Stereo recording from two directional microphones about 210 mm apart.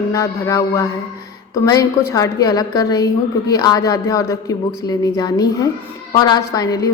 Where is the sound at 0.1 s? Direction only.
15° left (ahead or behind).